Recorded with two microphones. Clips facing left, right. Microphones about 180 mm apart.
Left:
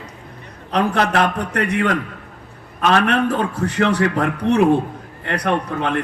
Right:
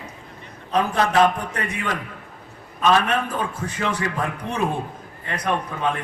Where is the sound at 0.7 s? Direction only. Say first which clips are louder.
Left 2 dB; 65° left (ahead or behind).